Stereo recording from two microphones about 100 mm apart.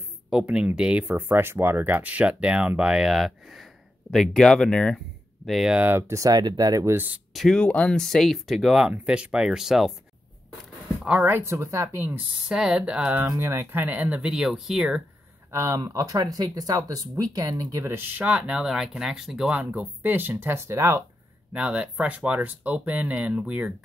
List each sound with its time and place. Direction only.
0.3 s speech: 10° right (ahead or behind)
5.8 s speech: 20° right (ahead or behind); by 6.9 s 40° right (ahead or behind)
6.9 s speech: 20° right (ahead or behind)
7.3 s speech: 5° left (ahead or behind)
11.1 s speech: 15° right (ahead or behind)
12.4 s speech: 10° right (ahead or behind)
15.5 s speech: 30° right (ahead or behind)
21.5 s speech: 10° right (ahead or behind)